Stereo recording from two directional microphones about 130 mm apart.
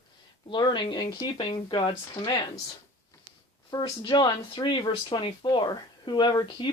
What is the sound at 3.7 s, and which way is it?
Speech, 35° left (ahead or behind).